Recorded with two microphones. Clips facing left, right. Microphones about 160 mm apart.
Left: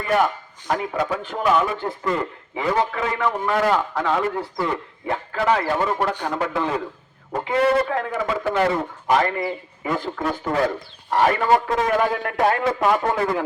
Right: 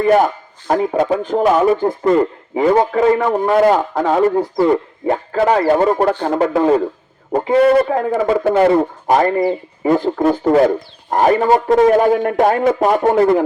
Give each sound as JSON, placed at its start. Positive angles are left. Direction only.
{"t": 0.0, "sound": "a man's voice", "side_deg": -40}
{"t": 8.4, "sound": "a man's voice", "side_deg": -45}
{"t": 11.4, "sound": "a man's voice", "side_deg": -20}
{"t": 11.7, "sound": "a man's voice", "side_deg": -40}